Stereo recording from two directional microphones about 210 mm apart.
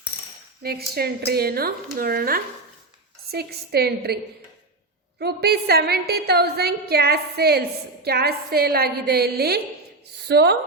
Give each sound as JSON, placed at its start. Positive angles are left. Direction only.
{"t": 0.6, "sound": "a woman's voice", "side_deg": -45}
{"t": 5.2, "sound": "a woman's voice", "side_deg": -50}